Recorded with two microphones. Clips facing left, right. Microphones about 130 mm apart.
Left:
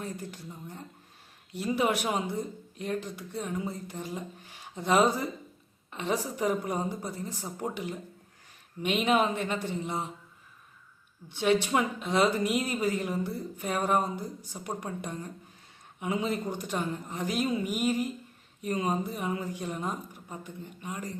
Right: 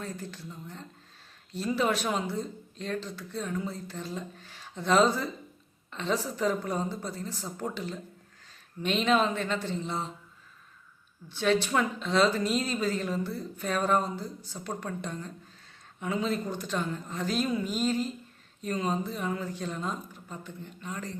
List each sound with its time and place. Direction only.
0.0 s speech: 15° left (ahead or behind)
11.3 s speech: 15° left (ahead or behind)